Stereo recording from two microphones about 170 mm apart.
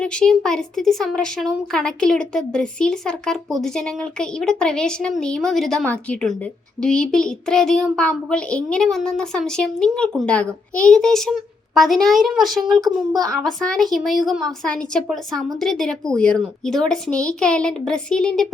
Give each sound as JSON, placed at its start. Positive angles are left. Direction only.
{"t": 0.0, "sound": "speech", "side_deg": 5}